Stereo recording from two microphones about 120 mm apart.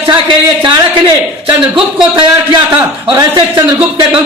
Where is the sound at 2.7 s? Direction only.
35° right (ahead or behind).